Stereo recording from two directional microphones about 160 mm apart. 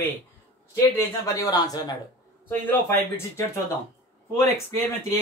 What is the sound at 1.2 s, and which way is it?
A man's voice, 20° left (ahead or behind).